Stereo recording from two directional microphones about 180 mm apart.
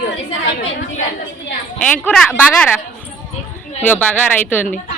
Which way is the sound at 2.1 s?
5° left (ahead or behind).